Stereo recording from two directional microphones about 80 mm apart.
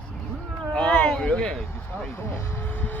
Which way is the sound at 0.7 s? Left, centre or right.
Centre.